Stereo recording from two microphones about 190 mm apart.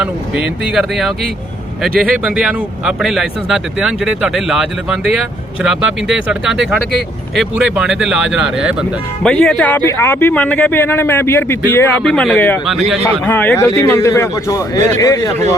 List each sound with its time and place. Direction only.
0.0 s a man's voice: 5° right (ahead or behind); by 15.3 s 15° left (ahead or behind)